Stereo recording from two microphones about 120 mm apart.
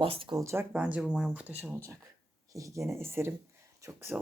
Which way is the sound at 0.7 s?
10° right (ahead or behind).